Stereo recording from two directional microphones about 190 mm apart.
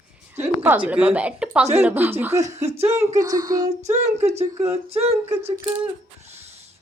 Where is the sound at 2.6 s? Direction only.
35° right (ahead or behind).